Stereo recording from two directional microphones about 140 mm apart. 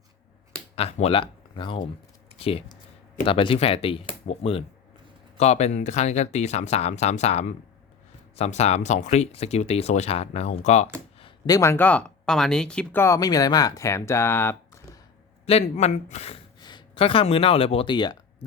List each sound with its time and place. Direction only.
0.8 s speech: 50° left (ahead or behind)
11.4 s speech: 25° left (ahead or behind); by 13.0 s 5° left (ahead or behind)
13.0 s speech: 25° left (ahead or behind)
15.4 s speech: 50° left (ahead or behind)
16.6 s speech: 30° left (ahead or behind)